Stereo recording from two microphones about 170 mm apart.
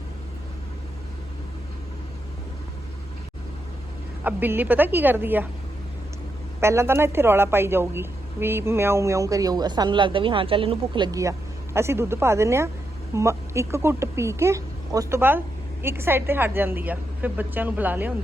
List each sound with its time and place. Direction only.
4.2 s a woman's voice: 10° right (ahead or behind)
6.6 s a woman's voice: 15° right (ahead or behind)